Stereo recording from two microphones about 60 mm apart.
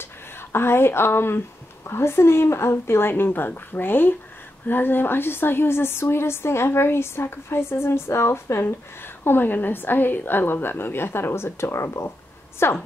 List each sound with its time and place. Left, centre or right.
0.0 s a woman's voice: left